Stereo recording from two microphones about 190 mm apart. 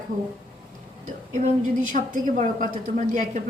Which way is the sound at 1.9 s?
45° right (ahead or behind).